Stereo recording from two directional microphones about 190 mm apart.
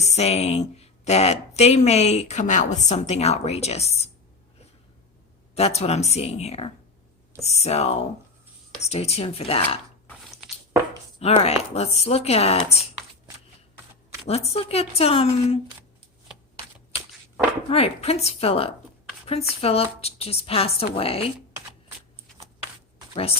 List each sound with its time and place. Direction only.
0.0 s speech: 35° left (ahead or behind)
5.5 s speech: 35° left (ahead or behind)
11.2 s speech: 35° left (ahead or behind)
14.3 s speech: 30° left (ahead or behind)
17.7 s speech: 30° left (ahead or behind)